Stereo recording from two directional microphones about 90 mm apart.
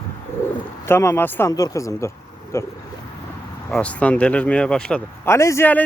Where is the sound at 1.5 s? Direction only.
40° left (ahead or behind).